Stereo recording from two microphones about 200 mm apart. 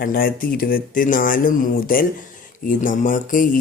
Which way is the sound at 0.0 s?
45° left (ahead or behind).